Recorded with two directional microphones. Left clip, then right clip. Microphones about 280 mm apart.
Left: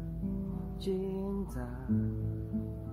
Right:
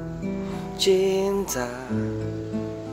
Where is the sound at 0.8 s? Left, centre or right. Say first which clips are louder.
Right 16 dB; right.